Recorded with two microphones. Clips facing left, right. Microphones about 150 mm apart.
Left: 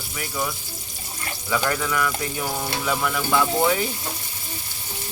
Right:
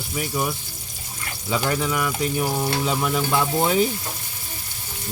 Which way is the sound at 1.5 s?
20° right (ahead or behind).